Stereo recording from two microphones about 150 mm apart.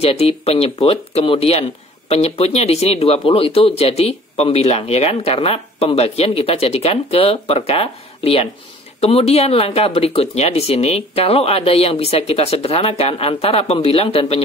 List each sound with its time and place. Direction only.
0.0 s speech: 40° left (ahead or behind)